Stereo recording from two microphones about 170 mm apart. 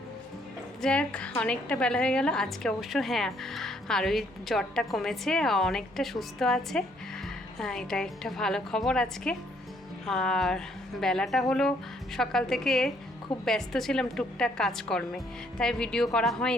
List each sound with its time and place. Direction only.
0.8 s a woman's voice: 5° left (ahead or behind)